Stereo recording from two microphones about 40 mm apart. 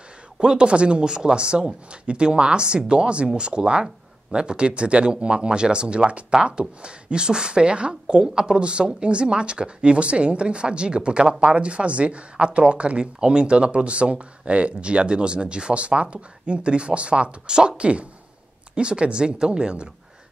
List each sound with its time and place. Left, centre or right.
0.4 s speech: right